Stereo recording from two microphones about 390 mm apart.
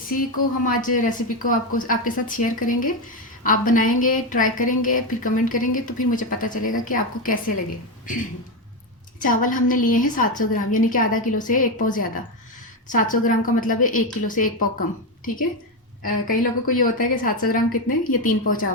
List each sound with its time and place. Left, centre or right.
0.6 s a woman's voice: left
9.2 s a woman's voice: left
16.0 s a woman's voice: left